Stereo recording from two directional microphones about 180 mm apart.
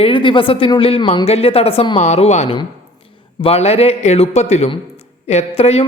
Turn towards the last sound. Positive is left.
turn(degrees=35)  # may be behind; listen again after turning